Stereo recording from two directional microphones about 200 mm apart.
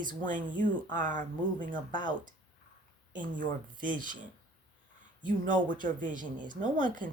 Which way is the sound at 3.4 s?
40° right (ahead or behind).